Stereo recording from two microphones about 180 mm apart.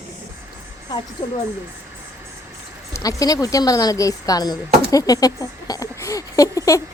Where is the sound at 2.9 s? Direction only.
20° left (ahead or behind).